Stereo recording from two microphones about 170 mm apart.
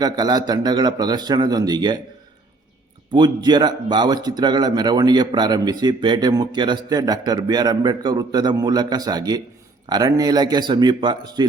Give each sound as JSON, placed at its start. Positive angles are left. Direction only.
{"t": 0.0, "sound": "speech", "side_deg": -25}
{"t": 3.1, "sound": "speech", "side_deg": -25}